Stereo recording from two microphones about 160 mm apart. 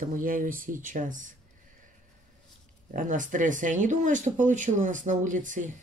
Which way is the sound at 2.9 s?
55° right (ahead or behind).